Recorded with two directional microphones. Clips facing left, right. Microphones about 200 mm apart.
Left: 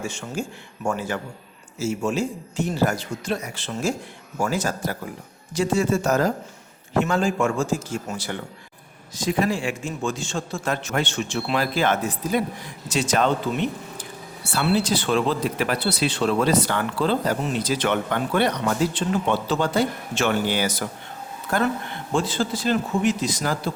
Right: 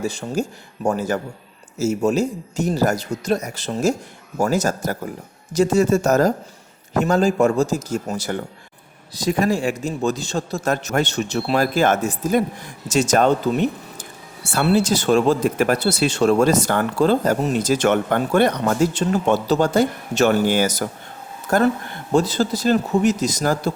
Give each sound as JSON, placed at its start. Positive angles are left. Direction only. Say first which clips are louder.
{"t": 0.0, "sound": "a man's voice", "louder": "right 6 dB", "side_deg": -35}